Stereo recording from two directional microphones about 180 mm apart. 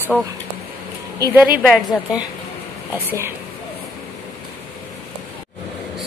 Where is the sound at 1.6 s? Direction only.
Centre (ahead or behind).